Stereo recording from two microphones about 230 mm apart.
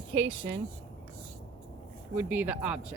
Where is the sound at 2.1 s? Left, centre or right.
Centre.